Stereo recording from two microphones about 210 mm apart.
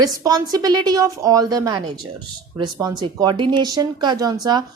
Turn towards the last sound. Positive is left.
turn(degrees=-20)  # may be behind; listen again after turning